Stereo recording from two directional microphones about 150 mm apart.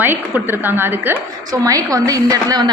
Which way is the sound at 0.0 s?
15° right (ahead or behind).